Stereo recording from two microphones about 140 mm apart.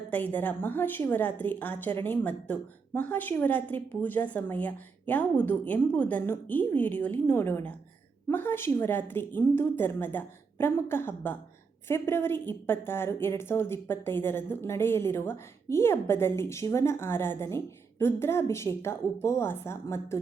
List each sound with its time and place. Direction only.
0.1 s a woman's voice: 10° left (ahead or behind)